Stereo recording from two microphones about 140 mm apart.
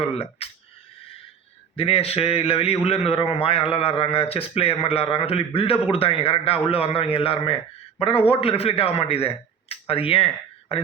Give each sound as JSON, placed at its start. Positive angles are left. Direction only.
{"t": 0.0, "sound": "a man's voice", "side_deg": 45}
{"t": 1.7, "sound": "a man's voice", "side_deg": 45}